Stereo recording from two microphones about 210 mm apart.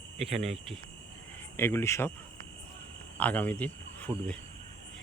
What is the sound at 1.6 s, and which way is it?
Speech, 10° left (ahead or behind).